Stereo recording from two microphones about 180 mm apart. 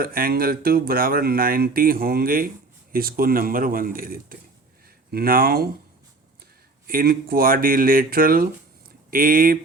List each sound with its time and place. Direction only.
0.0 s speech: 55° right (ahead or behind)
6.8 s speech: 55° right (ahead or behind)